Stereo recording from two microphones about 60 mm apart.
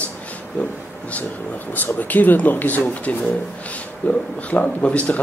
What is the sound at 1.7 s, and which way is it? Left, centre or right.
Speech, left.